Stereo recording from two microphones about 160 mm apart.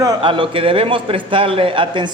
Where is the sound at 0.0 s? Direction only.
25° right (ahead or behind).